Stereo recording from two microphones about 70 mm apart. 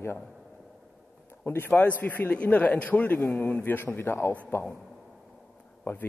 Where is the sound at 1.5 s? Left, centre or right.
Left.